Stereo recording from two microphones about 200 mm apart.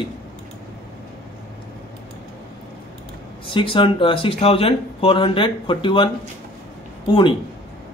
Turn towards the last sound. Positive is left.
turn(degrees=25)  # may be behind; listen again after turning